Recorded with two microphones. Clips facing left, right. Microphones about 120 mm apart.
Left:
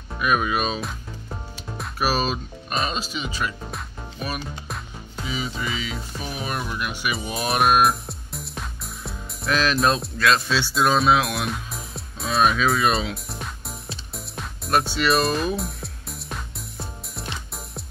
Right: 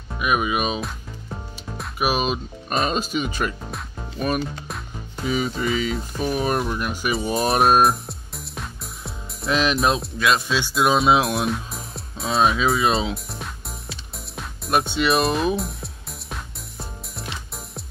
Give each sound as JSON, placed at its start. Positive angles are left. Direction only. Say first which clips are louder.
{"t": 0.2, "sound": "speech", "louder": "even", "side_deg": -15}
{"t": 0.7, "sound": "music", "louder": "right 1 dB", "side_deg": 0}
{"t": 2.0, "sound": "speech", "louder": "right 1 dB", "side_deg": -15}
{"t": 2.9, "sound": "speech", "louder": "right 5 dB", "side_deg": -50}
{"t": 5.2, "sound": "speech", "louder": "right 6 dB", "side_deg": -50}
{"t": 7.9, "sound": "music", "louder": "right 1 dB", "side_deg": 0}
{"t": 9.5, "sound": "speech", "louder": "right 1 dB", "side_deg": -20}
{"t": 9.8, "sound": "speech", "louder": "even", "side_deg": 0}
{"t": 11.1, "sound": "speech", "louder": "right 2 dB", "side_deg": -25}
{"t": 11.4, "sound": "music", "louder": "right 4 dB", "side_deg": 0}
{"t": 12.3, "sound": "speech", "louder": "right 1 dB", "side_deg": -25}
{"t": 13.1, "sound": "music", "louder": "right 1 dB", "side_deg": 0}
{"t": 14.7, "sound": "speech", "louder": "right 1 dB", "side_deg": -25}
{"t": 15.5, "sound": "music", "louder": "right 2 dB", "side_deg": 0}